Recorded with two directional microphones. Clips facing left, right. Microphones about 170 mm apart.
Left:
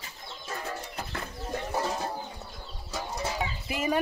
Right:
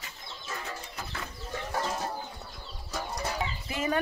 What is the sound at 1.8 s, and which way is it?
Bird, 5° left (ahead or behind).